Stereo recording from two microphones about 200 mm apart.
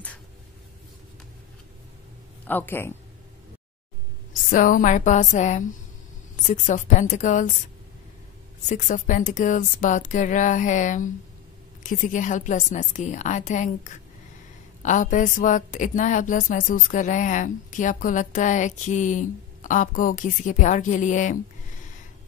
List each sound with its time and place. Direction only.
2.4 s speech: 10° left (ahead or behind)
4.5 s a woman's voice: 40° left (ahead or behind)
8.6 s a woman's voice: 35° left (ahead or behind)